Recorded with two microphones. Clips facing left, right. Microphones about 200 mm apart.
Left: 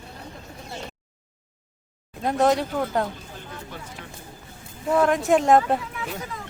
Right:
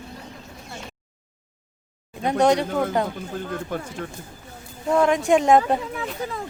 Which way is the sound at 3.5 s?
55° right (ahead or behind).